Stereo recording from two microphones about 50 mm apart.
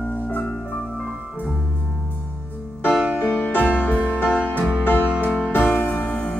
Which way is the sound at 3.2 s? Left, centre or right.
Left.